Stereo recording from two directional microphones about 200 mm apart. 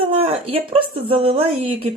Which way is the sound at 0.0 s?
30° right (ahead or behind).